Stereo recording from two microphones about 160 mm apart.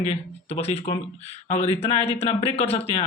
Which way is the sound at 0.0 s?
40° left (ahead or behind).